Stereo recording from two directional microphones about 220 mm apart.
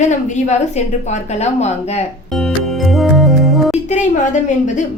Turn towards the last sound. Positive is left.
turn(degrees=35)  # may be behind; listen again after turning